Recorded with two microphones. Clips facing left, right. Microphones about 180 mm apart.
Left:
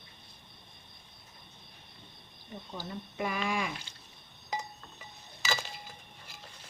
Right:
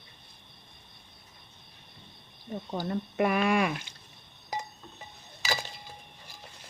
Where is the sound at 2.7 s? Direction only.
55° right (ahead or behind).